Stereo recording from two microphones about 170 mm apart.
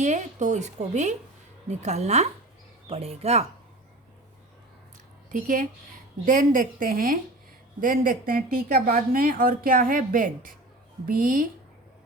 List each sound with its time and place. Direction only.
0.0 s a woman's voice: 45° right (ahead or behind)
5.3 s a woman's voice: 50° right (ahead or behind)